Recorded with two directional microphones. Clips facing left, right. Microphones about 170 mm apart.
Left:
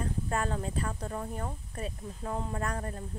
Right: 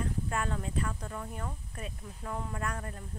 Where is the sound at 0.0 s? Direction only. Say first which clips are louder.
Left 2 dB; 35° left (ahead or behind).